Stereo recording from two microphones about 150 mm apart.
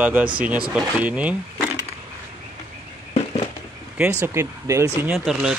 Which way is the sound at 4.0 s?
15° right (ahead or behind).